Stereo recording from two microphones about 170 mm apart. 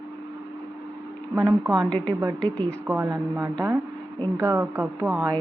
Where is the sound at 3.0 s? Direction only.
20° right (ahead or behind).